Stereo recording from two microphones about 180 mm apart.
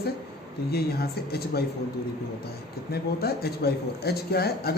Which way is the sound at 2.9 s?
60° left (ahead or behind).